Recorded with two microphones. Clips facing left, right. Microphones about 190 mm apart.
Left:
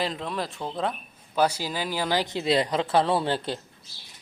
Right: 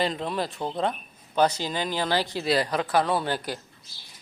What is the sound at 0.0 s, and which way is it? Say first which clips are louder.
Speech: right 2 dB; centre (ahead or behind).